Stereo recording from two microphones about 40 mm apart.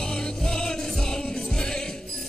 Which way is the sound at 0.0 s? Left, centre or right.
Centre.